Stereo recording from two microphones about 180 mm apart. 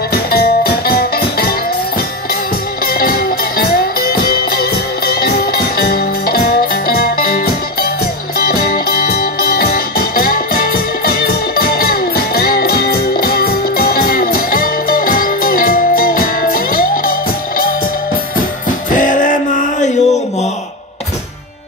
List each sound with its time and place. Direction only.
0.1 s music: 60° left (ahead or behind)
2.8 s music: 55° left (ahead or behind)
18.9 s music: 45° left (ahead or behind)